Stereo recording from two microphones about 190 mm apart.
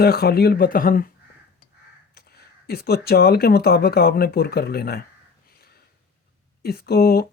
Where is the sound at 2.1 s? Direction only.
55° left (ahead or behind).